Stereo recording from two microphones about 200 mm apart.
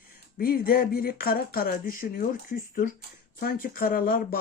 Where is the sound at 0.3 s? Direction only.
45° left (ahead or behind).